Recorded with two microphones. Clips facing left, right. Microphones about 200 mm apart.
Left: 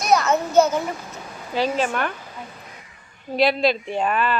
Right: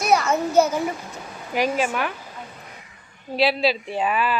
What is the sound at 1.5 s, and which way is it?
Speech, 10° right (ahead or behind).